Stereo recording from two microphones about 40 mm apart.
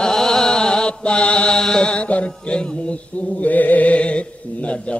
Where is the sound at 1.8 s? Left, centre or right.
Left.